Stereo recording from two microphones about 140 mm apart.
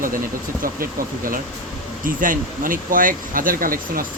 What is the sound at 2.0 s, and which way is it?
Speech, 75° right (ahead or behind).